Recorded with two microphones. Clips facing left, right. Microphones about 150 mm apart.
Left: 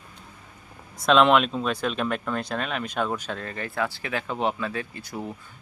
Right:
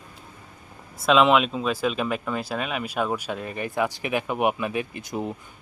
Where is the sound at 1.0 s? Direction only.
5° right (ahead or behind).